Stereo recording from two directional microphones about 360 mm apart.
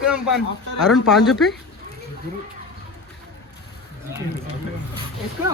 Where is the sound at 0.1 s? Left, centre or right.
Centre.